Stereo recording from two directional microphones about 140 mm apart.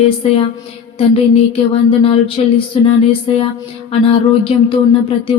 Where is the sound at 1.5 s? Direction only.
40° left (ahead or behind).